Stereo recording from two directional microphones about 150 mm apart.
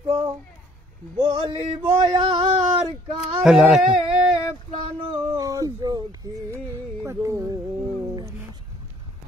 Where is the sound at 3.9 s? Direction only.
40° right (ahead or behind).